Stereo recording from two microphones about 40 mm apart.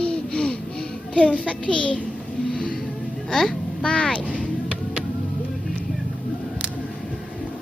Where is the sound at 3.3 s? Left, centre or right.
Centre.